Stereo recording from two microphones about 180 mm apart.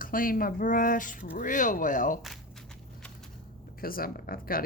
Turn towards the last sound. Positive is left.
turn(degrees=55)  # may be behind; listen again after turning